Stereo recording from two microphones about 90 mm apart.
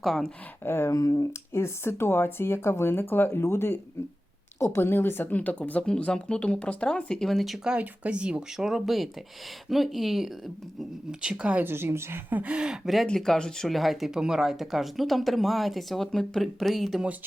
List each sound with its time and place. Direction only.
0.0 s speech: centre (ahead or behind)
0.6 s speech: 25° left (ahead or behind)
0.9 s speech: 40° left (ahead or behind); by 11.6 s 10° right (ahead or behind)
11.6 s speech: 25° right (ahead or behind); by 17.1 s centre (ahead or behind)